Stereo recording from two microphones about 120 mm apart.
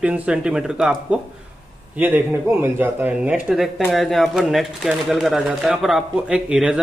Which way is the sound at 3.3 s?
5° right (ahead or behind).